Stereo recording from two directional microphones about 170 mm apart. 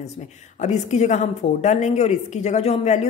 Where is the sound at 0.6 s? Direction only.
45° left (ahead or behind).